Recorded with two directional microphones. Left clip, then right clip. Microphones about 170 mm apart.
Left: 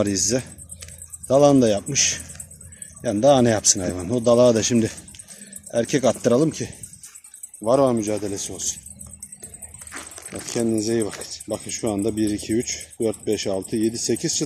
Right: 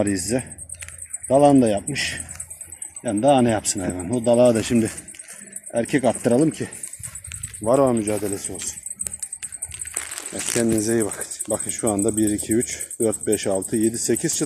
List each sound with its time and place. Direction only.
0.0 s speech: 15° left (ahead or behind)
7.6 s speech: 5° right (ahead or behind)
10.6 s speech: 10° right (ahead or behind)